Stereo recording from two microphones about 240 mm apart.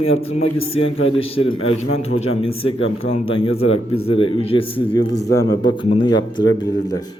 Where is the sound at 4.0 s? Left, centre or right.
Left.